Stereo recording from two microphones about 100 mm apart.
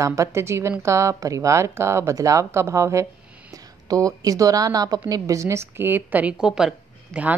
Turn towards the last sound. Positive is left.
turn(degrees=-5)  # may be behind; listen again after turning